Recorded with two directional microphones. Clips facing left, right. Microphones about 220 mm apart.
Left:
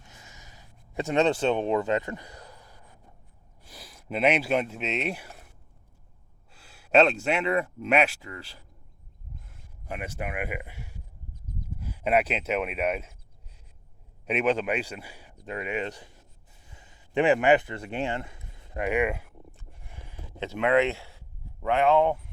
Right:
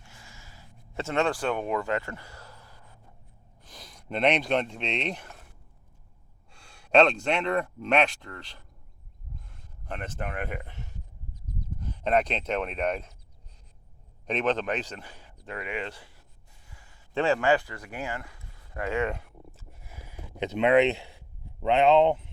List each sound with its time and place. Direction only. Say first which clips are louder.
0.0 s a sound: even; 20° left (ahead or behind)
3.6 s speech: left 1 dB; 5° left (ahead or behind)
6.5 s a man's voice: even; 5° left (ahead or behind)
14.3 s a man's voice: left 2 dB; 10° left (ahead or behind)
16.6 s a sound: left 2 dB; 20° left (ahead or behind); by 20.5 s 10° right (ahead or behind)
20.5 s speech: right 2 dB; 20° right (ahead or behind)